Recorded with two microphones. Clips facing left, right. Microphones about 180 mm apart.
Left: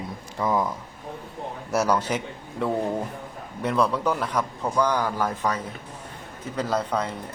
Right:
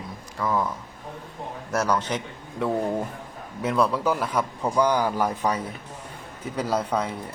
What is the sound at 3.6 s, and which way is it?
A man's voice, centre (ahead or behind).